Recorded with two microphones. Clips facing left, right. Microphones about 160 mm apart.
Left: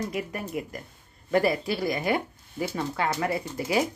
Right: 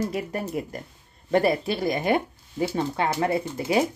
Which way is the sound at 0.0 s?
30° right (ahead or behind).